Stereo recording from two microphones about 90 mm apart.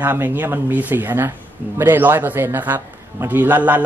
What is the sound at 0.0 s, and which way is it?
Speech, 20° right (ahead or behind).